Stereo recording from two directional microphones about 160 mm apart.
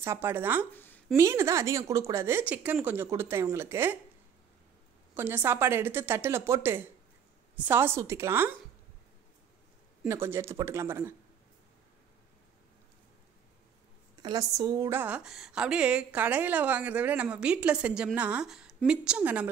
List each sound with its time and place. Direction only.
0.0 s a woman's voice: 15° right (ahead or behind)
5.1 s a woman's voice: 10° right (ahead or behind)
10.0 s a woman's voice: 15° right (ahead or behind)
14.2 s a woman's voice: 20° right (ahead or behind)